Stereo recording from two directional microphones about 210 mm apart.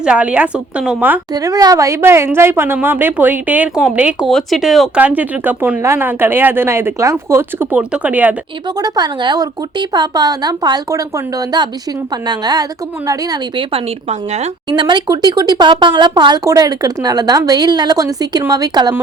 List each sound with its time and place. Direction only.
0.0 s a woman's voice: 5° right (ahead or behind)
8.8 s a woman's voice: 20° right (ahead or behind)